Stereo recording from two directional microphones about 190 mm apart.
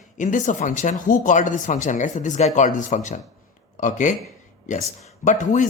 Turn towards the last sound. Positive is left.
turn(degrees=40)  # may be behind; listen again after turning